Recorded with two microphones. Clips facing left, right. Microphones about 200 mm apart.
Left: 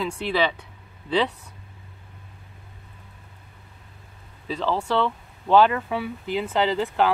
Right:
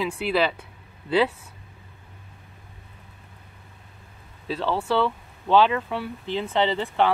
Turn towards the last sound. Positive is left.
turn(degrees=0)  # may be behind; listen again after turning